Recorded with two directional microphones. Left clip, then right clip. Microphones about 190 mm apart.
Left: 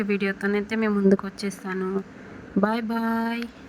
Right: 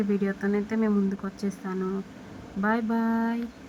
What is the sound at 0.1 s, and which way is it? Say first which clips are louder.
Speech: left 3 dB; 20° left (ahead or behind).